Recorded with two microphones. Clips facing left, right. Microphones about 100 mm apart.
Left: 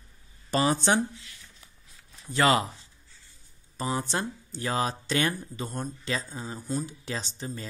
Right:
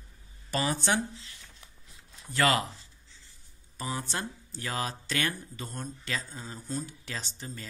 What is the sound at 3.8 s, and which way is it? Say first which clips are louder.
Speech: left 5 dB; 30° left (ahead or behind).